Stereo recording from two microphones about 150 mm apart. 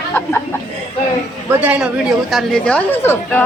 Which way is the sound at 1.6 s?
10° right (ahead or behind).